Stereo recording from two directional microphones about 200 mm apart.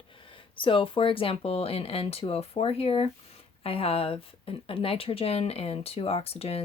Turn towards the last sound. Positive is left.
turn(degrees=30)  # may be behind; listen again after turning